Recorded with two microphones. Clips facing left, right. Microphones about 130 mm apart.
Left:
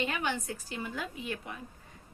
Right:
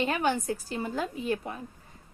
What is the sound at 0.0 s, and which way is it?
A woman's voice, 40° right (ahead or behind).